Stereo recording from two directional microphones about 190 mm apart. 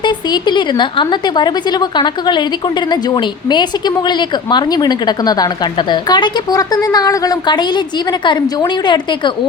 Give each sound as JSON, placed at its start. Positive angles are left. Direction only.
{"t": 0.0, "sound": "a woman's voice", "side_deg": 20}